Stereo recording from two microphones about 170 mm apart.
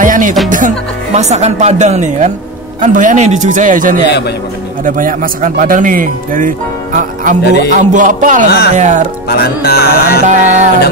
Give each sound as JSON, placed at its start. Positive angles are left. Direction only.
{"t": 0.0, "sound": "music", "side_deg": -50}
{"t": 0.5, "sound": "speech", "side_deg": -50}
{"t": 8.5, "sound": "music", "side_deg": 70}
{"t": 8.7, "sound": "speech", "side_deg": -45}
{"t": 9.3, "sound": "music", "side_deg": 65}
{"t": 10.2, "sound": "speech", "side_deg": -45}